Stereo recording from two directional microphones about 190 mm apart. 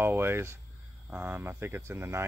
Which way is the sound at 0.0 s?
10° right (ahead or behind).